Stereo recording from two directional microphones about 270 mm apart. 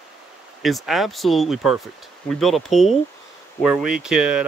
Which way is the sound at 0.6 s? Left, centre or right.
Centre.